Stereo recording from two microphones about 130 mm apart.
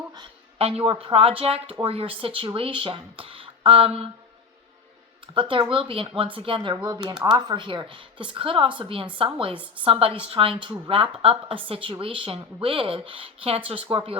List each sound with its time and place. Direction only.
0.1 s a woman's voice: 45° right (ahead or behind)
5.2 s a woman's voice: 40° right (ahead or behind)